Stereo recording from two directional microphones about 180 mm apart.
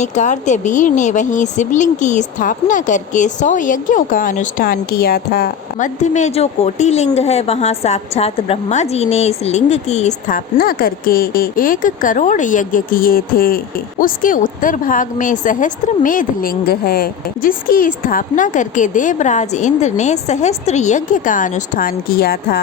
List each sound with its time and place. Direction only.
0.0 s speech: 40° left (ahead or behind); by 5.9 s 55° left (ahead or behind)
6.0 s speech: 40° left (ahead or behind); by 22.6 s 55° left (ahead or behind)